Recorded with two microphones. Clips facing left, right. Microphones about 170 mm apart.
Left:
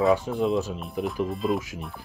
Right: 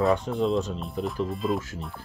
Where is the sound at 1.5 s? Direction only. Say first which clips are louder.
Left 1 dB; 10° left (ahead or behind).